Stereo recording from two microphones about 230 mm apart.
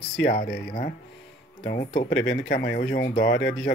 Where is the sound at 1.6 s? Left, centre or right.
Left.